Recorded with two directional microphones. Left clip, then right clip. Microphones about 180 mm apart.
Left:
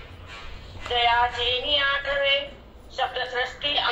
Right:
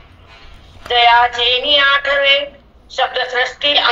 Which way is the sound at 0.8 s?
45° right (ahead or behind).